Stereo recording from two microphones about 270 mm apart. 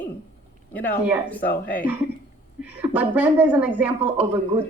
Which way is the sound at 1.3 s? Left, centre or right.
Centre.